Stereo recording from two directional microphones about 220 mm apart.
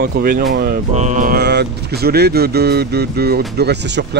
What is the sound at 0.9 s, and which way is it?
Speech, 35° right (ahead or behind).